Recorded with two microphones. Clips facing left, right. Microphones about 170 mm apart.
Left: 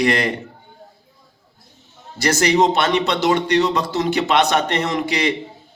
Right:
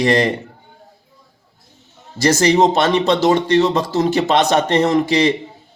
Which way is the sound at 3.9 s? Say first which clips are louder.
Right 2 dB; 40° right (ahead or behind).